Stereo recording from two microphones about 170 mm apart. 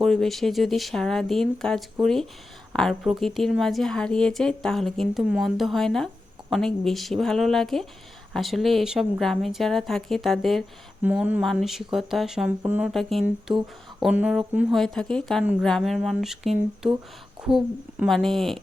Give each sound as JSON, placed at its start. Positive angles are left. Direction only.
{"t": 0.0, "sound": "a woman's voice", "side_deg": 0}
{"t": 12.9, "sound": "a woman's voice", "side_deg": 0}
{"t": 18.0, "sound": "a woman's voice", "side_deg": 0}